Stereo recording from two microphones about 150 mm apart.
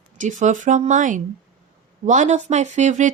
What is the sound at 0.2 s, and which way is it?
A woman's voice, 55° right (ahead or behind).